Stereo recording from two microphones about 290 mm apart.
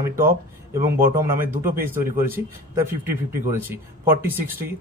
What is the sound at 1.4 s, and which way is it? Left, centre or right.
Speech, right.